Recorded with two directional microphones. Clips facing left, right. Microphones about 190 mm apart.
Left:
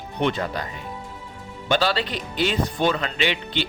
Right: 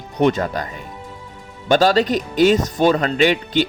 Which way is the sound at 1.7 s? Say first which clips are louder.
Right 8 dB; 45° right (ahead or behind).